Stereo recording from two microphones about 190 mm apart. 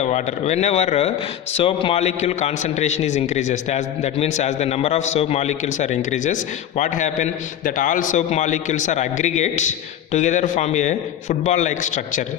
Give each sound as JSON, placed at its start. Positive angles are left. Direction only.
{"t": 0.0, "sound": "a man's voice", "side_deg": 35}